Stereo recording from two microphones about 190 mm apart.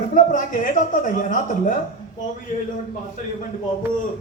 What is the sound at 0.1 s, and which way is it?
A man's voice, 40° left (ahead or behind).